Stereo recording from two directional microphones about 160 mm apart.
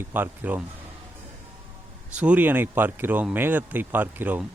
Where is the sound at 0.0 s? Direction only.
10° right (ahead or behind).